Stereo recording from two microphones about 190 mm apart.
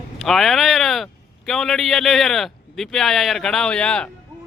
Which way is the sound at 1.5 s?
Centre (ahead or behind).